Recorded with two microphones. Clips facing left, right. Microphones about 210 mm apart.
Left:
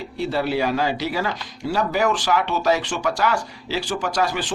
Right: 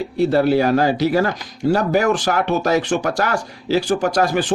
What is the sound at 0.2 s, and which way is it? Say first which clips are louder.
Speech: right 7 dB; 45° right (ahead or behind).